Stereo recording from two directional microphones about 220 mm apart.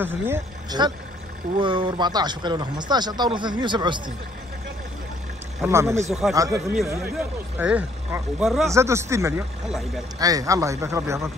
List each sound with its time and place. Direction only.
0.0 s a man's voice: 10° right (ahead or behind)
5.6 s a man's voice: 10° right (ahead or behind)
8.6 s a man's voice: 15° right (ahead or behind)
9.7 s speech: centre (ahead or behind)
10.1 s a man's voice: 15° right (ahead or behind)